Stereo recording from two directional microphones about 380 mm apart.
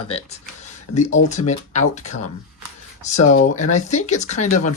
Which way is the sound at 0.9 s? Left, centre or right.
Centre.